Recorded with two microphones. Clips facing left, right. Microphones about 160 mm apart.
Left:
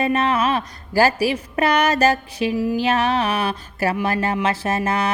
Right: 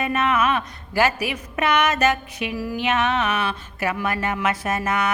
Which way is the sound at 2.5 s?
20° left (ahead or behind).